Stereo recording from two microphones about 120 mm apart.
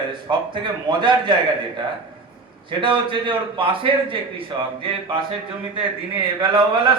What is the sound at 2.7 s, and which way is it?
A man's voice, 45° right (ahead or behind).